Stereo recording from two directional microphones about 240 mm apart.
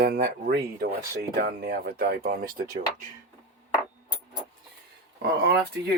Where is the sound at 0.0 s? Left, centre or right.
Right.